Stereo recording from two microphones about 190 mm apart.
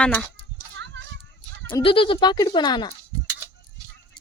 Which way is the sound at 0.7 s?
70° right (ahead or behind).